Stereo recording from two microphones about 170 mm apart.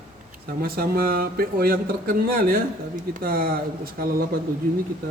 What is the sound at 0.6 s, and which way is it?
Speech, 60° right (ahead or behind).